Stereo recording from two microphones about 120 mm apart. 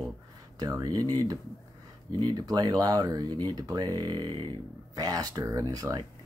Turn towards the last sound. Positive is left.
turn(degrees=-30)  # may be behind; listen again after turning